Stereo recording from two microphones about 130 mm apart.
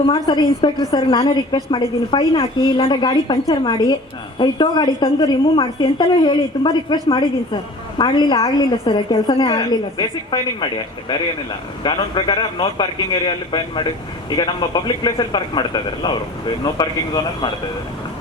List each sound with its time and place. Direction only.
0.1 s a man's voice: 35° left (ahead or behind)
0.9 s a man's voice: 40° left (ahead or behind)
8.4 s a woman's voice: 25° left (ahead or behind)
8.7 s a man's voice: 40° left (ahead or behind)
9.5 s a man's voice: 30° left (ahead or behind)
11.8 s a man's voice: 35° left (ahead or behind)